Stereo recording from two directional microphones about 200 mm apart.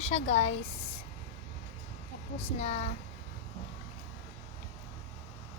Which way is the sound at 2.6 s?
35° left (ahead or behind).